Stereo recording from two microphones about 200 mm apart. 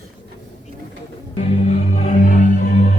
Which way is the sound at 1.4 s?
35° left (ahead or behind).